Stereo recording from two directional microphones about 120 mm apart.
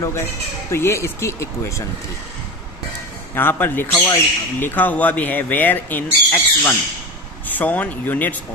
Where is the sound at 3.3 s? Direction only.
15° left (ahead or behind).